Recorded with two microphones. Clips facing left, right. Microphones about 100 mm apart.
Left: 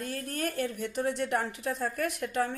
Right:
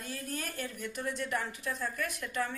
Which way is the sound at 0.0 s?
55° left (ahead or behind).